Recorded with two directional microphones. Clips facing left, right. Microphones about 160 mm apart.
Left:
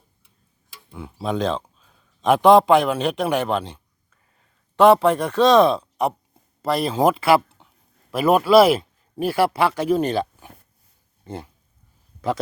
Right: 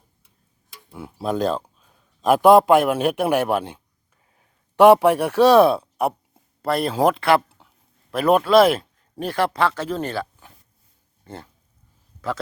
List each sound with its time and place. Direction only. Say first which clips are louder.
0.9 s a man's voice: right 1 dB; 5° right (ahead or behind); by 11.4 s 15° left (ahead or behind)